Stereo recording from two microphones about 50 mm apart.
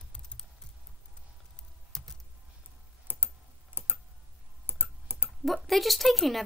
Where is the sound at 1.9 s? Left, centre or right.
Centre.